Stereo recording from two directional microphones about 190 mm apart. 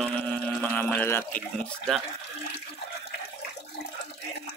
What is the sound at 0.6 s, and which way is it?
Speech, 10° left (ahead or behind).